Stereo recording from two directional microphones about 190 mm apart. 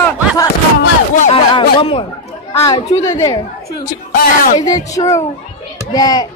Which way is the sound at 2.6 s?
30° left (ahead or behind).